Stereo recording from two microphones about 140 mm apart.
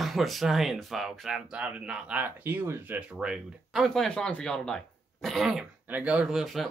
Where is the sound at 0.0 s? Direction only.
Centre (ahead or behind).